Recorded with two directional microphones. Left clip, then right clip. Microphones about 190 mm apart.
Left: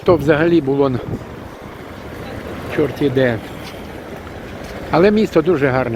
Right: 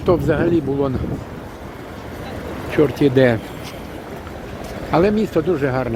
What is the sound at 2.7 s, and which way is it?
Speech, 25° right (ahead or behind).